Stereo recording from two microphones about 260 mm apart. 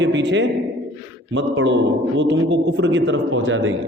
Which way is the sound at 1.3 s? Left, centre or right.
Right.